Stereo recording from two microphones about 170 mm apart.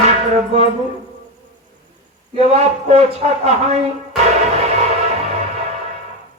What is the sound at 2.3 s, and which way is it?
Speech, 40° right (ahead or behind).